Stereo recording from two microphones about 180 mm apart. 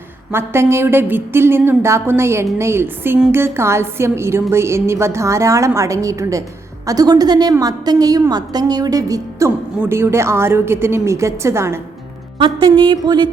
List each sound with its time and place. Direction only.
0.3 s a woman's voice: 15° right (ahead or behind)
12.4 s a woman's voice: 30° right (ahead or behind)